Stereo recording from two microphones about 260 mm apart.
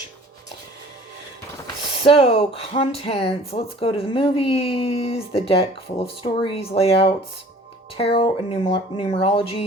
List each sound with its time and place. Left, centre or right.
1.6 s speech: left